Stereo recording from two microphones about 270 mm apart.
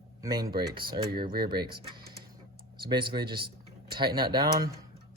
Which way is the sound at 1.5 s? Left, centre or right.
Centre.